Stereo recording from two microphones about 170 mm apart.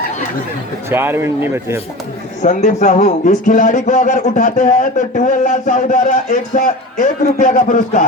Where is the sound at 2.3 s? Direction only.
45° left (ahead or behind).